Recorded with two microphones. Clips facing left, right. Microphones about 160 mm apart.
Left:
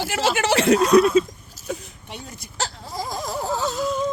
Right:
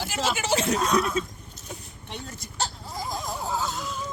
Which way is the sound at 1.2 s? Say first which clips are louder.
Left 10 dB; 90° left.